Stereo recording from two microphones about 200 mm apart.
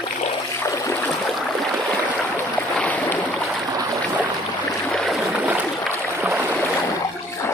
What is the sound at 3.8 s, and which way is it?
Boat, 15° right (ahead or behind).